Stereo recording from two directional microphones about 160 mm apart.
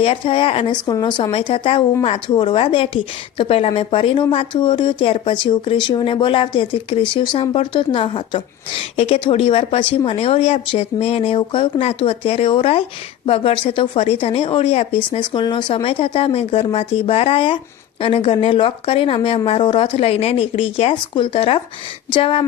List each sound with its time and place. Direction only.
0.0 s a woman's voice: 35° left (ahead or behind)